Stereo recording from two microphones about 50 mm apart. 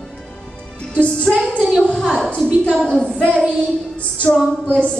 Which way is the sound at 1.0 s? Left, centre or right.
Left.